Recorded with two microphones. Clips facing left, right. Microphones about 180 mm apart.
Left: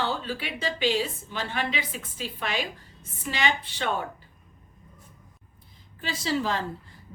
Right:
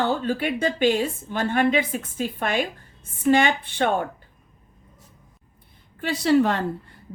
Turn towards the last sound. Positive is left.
turn(degrees=-65)  # may be behind; listen again after turning